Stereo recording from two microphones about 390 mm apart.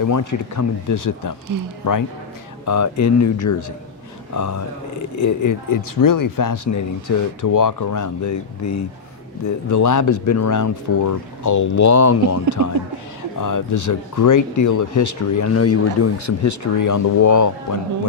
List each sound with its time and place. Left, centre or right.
0.0 s speech: left